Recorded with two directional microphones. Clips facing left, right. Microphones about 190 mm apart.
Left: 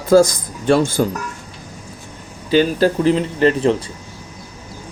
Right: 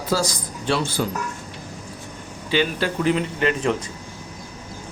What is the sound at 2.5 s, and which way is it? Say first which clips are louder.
Speech: left 8 dB; 40° left (ahead or behind).